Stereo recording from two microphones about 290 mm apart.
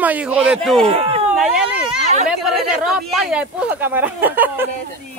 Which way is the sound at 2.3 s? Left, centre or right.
Centre.